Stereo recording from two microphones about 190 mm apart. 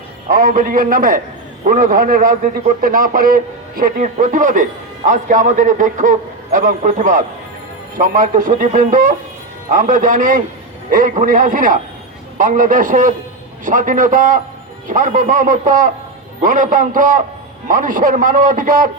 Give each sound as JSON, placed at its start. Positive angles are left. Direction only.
{"t": 0.3, "sound": "a man's voice", "side_deg": -40}